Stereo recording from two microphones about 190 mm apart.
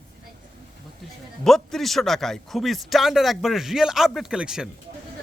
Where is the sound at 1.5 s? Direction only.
Centre (ahead or behind).